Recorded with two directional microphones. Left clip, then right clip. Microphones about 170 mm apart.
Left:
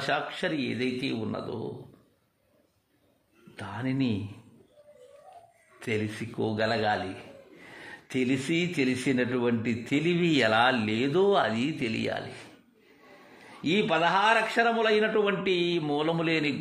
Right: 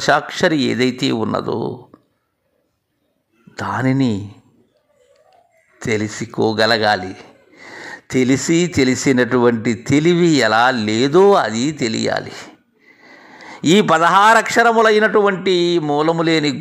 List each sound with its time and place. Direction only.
0.0 s a man's voice: 45° right (ahead or behind)
3.5 s a man's voice: 45° right (ahead or behind)
5.8 s speech: 35° right (ahead or behind)
13.5 s a man's voice: 45° right (ahead or behind)